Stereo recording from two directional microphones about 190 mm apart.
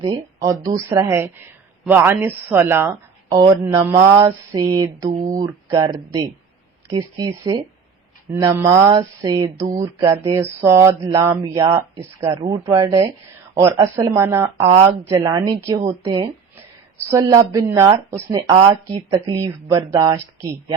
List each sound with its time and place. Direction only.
0.3 s speech: 20° right (ahead or behind)